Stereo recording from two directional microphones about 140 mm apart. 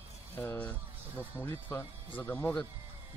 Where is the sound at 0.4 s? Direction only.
10° left (ahead or behind).